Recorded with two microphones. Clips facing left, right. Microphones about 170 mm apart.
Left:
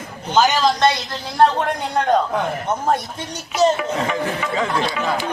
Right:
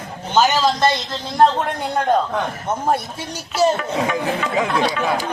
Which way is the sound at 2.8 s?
10° right (ahead or behind).